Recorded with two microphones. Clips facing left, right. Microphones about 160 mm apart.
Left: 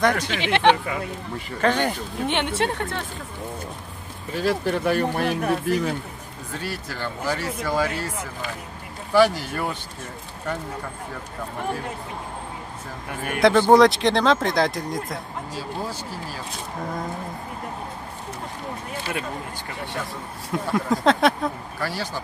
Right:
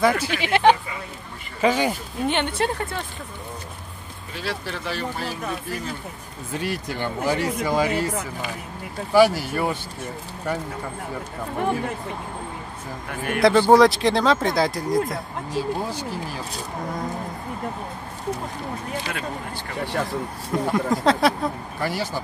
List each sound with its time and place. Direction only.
0.0 s speech: 5° right (ahead or behind)
4.4 s speech: 50° left (ahead or behind)
6.6 s speech: 20° right (ahead or behind)
9.1 s speech: 10° right (ahead or behind)
13.4 s speech: centre (ahead or behind)
20.5 s speech: centre (ahead or behind)
21.8 s speech: 15° right (ahead or behind)